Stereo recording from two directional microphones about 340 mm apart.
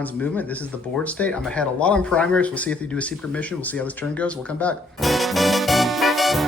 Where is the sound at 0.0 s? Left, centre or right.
Centre.